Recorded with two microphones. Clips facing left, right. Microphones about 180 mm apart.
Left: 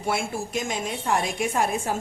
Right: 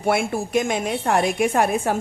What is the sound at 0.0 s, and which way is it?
A woman's voice, 60° right (ahead or behind).